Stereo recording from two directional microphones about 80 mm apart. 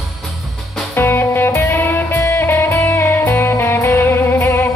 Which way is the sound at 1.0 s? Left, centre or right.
Left.